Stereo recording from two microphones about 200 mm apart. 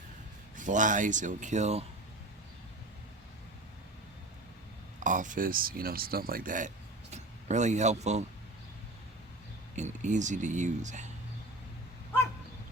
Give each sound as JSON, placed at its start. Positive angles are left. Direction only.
{"t": 0.5, "sound": "speech", "side_deg": -40}
{"t": 4.9, "sound": "speech", "side_deg": -40}
{"t": 9.7, "sound": "speech", "side_deg": -35}